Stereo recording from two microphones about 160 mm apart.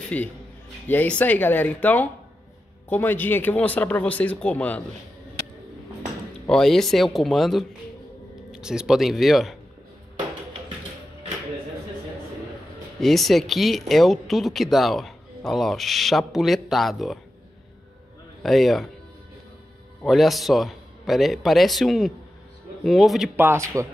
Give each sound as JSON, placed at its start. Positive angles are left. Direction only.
{"t": 0.1, "sound": "speech", "side_deg": 10}
{"t": 6.4, "sound": "speech", "side_deg": 5}
{"t": 13.0, "sound": "speech", "side_deg": 0}
{"t": 18.4, "sound": "speech", "side_deg": 0}
{"t": 20.0, "sound": "speech", "side_deg": 0}
{"t": 23.3, "sound": "speech", "side_deg": -15}